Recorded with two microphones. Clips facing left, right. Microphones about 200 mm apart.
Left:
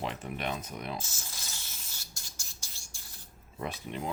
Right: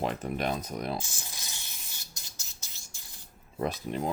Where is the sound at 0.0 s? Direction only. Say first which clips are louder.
Right 5 dB; 40° right (ahead or behind).